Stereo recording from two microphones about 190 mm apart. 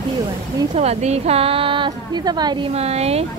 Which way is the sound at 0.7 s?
35° right (ahead or behind).